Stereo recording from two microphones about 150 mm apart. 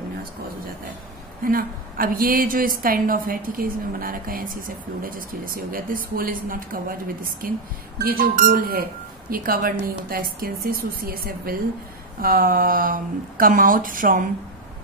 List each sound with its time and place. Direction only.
1.4 s a woman's voice: 75° right (ahead or behind)